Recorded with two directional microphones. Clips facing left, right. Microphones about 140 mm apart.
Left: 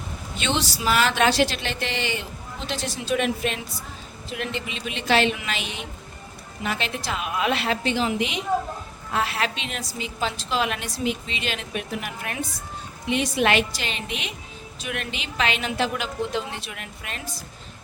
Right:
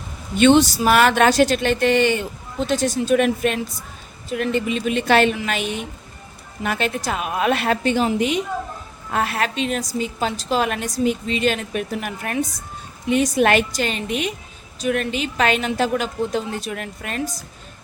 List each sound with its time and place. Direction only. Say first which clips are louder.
0.3 s speech: right 13 dB; 55° right (ahead or behind)